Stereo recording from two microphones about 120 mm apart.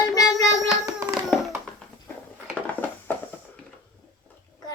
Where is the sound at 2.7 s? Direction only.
15° left (ahead or behind).